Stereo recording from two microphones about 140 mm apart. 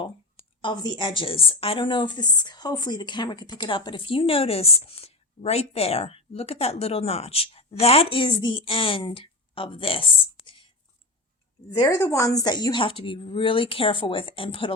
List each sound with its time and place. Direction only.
0.6 s a woman's voice: 30° left (ahead or behind)
10.4 s whispering: 35° left (ahead or behind)
11.7 s a woman's voice: 20° left (ahead or behind); by 14.8 s 40° left (ahead or behind)